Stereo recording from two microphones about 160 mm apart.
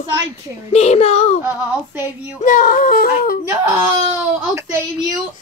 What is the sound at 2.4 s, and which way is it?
Speech, 60° left (ahead or behind).